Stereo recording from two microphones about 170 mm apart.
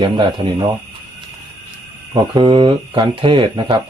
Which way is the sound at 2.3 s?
25° right (ahead or behind).